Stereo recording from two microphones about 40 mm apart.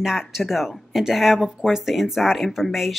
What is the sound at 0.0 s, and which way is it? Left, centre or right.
Speech, centre.